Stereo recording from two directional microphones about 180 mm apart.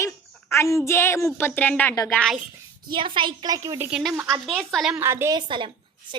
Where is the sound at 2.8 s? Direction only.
25° right (ahead or behind).